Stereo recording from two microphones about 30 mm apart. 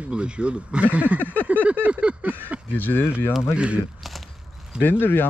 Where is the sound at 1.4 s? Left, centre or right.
Right.